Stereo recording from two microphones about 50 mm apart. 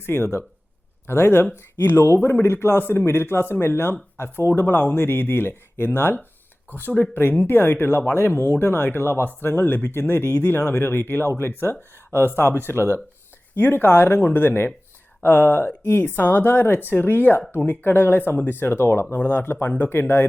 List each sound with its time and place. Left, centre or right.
0.1 s a woman's voice: left
19.1 s speech: left
19.4 s speech: left